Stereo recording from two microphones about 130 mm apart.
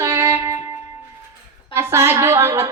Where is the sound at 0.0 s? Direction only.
20° right (ahead or behind).